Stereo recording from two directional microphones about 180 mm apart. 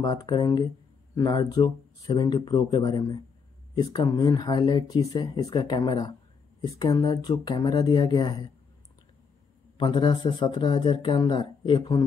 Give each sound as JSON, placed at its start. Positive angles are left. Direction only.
{"t": 0.0, "sound": "speech", "side_deg": 25}
{"t": 9.8, "sound": "speech", "side_deg": 25}